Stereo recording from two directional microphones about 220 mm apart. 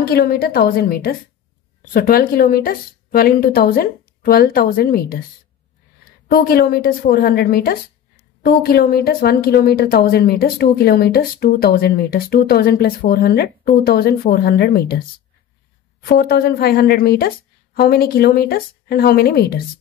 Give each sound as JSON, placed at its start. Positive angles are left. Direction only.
{"t": 0.0, "sound": "a woman's voice", "side_deg": 45}
{"t": 6.2, "sound": "a woman's voice", "side_deg": 40}
{"t": 16.0, "sound": "speech", "side_deg": 45}